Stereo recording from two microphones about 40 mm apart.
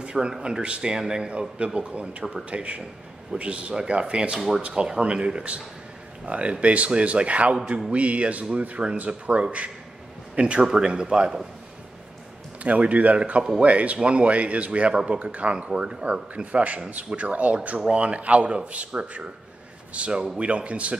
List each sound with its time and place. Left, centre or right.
0.0 s a sound: right
0.4 s speech: right
12.6 s speech: right
15.6 s speech: right
19.9 s a man's voice: right